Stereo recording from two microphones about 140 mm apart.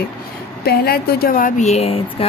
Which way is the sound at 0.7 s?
90° left.